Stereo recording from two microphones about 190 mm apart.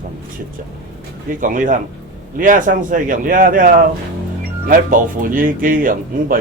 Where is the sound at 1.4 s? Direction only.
45° right (ahead or behind).